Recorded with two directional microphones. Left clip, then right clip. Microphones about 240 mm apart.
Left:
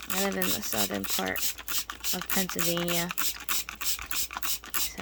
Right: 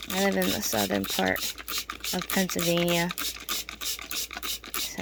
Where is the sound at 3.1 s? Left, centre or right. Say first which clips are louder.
Even; left.